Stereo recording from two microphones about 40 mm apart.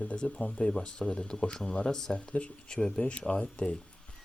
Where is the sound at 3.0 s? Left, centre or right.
Left.